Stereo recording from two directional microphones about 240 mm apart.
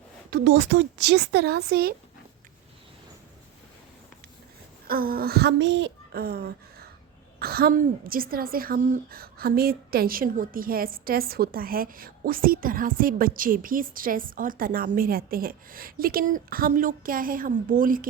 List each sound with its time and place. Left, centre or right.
0.3 s speech: right
4.9 s a child's voice: right